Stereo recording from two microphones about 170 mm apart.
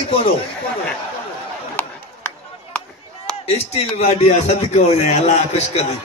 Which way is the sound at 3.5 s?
35° left (ahead or behind).